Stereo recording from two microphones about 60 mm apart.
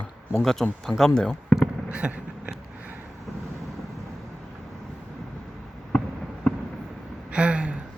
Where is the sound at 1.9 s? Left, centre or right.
Right.